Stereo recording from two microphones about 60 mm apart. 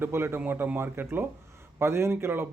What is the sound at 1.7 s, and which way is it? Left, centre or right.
Speech, right.